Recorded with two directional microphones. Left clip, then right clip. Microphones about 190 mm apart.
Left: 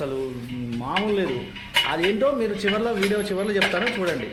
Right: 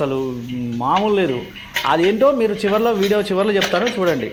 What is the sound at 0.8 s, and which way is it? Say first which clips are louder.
Speech: right 8 dB; 35° right (ahead or behind).